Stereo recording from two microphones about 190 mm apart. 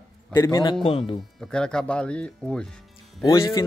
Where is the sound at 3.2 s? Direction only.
15° left (ahead or behind).